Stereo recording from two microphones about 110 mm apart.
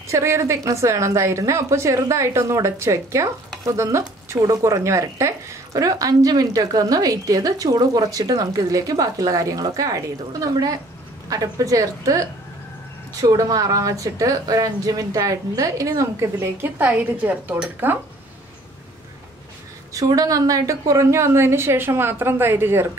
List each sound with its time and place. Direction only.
0.1 s a woman's voice: 25° right (ahead or behind)
16.3 s a woman's voice: 15° right (ahead or behind)
19.9 s a woman's voice: 30° right (ahead or behind)